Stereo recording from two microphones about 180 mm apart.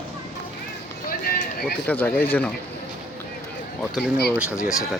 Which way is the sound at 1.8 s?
10° left (ahead or behind).